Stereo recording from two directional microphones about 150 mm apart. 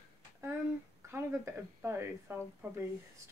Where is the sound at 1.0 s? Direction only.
20° right (ahead or behind).